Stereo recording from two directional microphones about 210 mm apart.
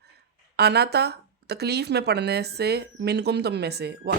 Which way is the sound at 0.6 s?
50° right (ahead or behind).